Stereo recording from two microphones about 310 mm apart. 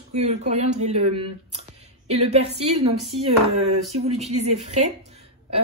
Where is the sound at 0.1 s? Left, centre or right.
Right.